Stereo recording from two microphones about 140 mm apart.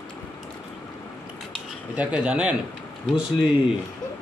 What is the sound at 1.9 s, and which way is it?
Speech, 5° right (ahead or behind).